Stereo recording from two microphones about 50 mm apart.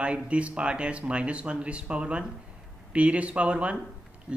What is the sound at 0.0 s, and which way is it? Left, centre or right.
A man's voice, right.